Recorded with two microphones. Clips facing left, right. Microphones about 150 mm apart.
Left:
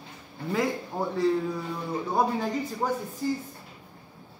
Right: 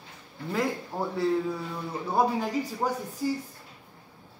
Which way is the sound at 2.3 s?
10° right (ahead or behind).